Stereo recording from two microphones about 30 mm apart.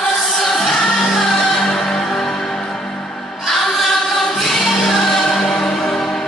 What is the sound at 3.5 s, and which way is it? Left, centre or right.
Music, centre.